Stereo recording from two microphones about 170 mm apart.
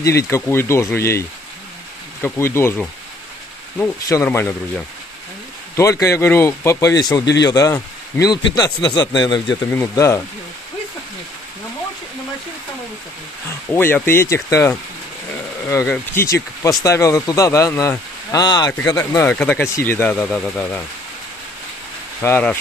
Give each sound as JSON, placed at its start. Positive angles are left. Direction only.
{"t": 0.0, "sound": "speech", "side_deg": 20}
{"t": 2.2, "sound": "speech", "side_deg": 15}
{"t": 9.7, "sound": "speech", "side_deg": 15}
{"t": 13.7, "sound": "speech", "side_deg": 15}
{"t": 22.2, "sound": "speech", "side_deg": 10}